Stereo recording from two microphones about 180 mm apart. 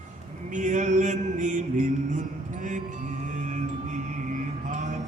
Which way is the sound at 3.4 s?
40° right (ahead or behind).